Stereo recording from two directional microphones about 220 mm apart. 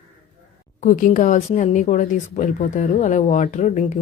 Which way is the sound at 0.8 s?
35° left (ahead or behind).